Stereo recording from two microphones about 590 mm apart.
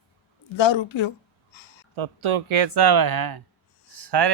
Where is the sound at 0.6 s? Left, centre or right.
Left.